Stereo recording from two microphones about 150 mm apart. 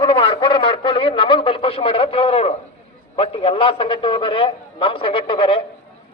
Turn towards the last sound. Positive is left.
turn(degrees=35)  # may be behind; listen again after turning